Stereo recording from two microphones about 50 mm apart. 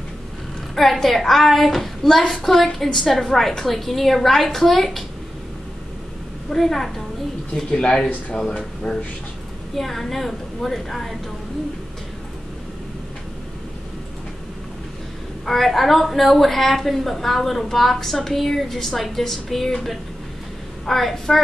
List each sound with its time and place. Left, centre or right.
0.9 s a woman's voice: centre
6.5 s a woman's voice: centre
7.5 s a woman's voice: centre
15.4 s a woman's voice: centre